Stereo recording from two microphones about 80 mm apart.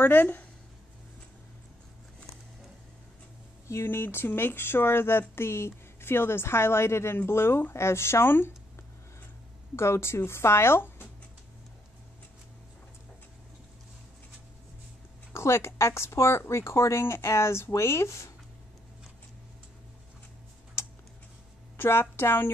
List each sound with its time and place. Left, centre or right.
0.0 s speech: left
3.6 s speech: left
9.8 s speech: left
15.3 s speech: left
20.8 s tick-tock: left
21.7 s a woman's voice: left